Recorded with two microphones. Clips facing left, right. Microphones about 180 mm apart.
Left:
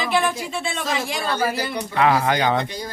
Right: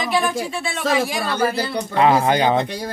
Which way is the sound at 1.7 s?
25° right (ahead or behind).